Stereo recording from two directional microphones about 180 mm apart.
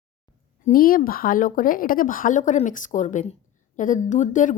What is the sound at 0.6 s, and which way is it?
A woman's voice, 50° left (ahead or behind).